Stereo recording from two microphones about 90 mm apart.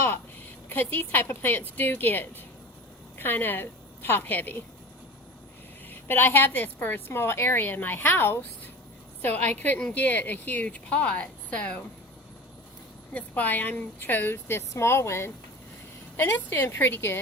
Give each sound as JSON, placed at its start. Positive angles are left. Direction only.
{"t": 0.7, "sound": "a woman's voice", "side_deg": 25}
{"t": 5.9, "sound": "a woman's voice", "side_deg": 25}
{"t": 13.1, "sound": "a woman's voice", "side_deg": 15}